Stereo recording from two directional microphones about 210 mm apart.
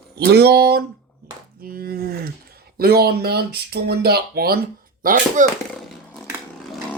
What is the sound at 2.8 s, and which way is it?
Speech, 45° right (ahead or behind).